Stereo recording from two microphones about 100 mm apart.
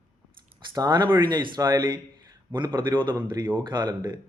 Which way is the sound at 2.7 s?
55° right (ahead or behind).